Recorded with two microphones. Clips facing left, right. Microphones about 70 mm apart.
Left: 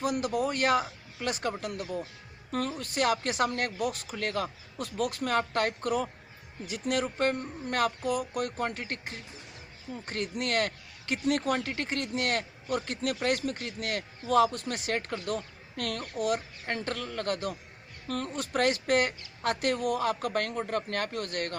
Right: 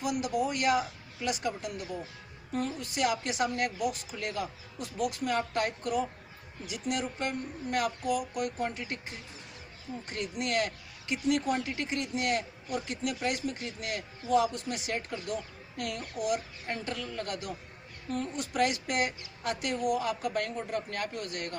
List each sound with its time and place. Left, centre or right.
0.0 s speech: left
2.5 s speech: left